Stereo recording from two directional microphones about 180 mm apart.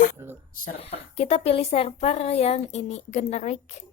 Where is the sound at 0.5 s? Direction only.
55° left (ahead or behind).